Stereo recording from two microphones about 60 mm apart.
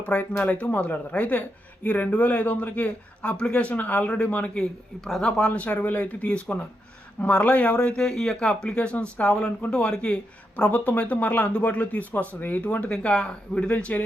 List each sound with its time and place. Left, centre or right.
0.1 s speech: left
4.9 s speech: centre
5.4 s speech: left